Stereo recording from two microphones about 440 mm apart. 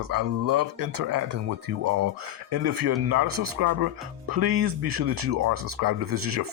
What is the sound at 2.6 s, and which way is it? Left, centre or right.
Speech, right.